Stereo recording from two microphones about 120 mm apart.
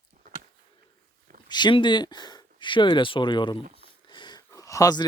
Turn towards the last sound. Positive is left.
turn(degrees=30)  # may be behind; listen again after turning